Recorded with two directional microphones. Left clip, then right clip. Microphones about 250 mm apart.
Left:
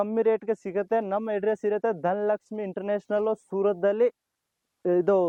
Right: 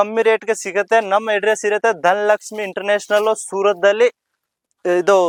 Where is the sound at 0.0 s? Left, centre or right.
Centre.